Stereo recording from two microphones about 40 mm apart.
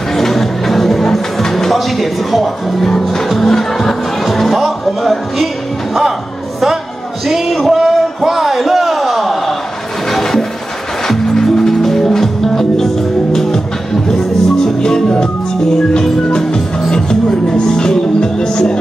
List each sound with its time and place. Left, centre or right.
0.1 s music: centre
2.9 s music: centre
7.2 s a sound: centre
10.1 s music: centre
14.8 s music: centre